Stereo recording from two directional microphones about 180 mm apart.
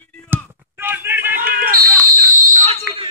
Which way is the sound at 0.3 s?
10° right (ahead or behind).